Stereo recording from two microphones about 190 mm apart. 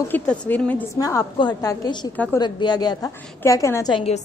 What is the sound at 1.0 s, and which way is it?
Speech, 20° left (ahead or behind).